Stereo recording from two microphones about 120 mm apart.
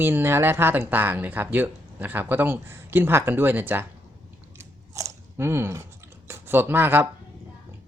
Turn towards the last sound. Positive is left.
turn(degrees=-20)  # may be behind; listen again after turning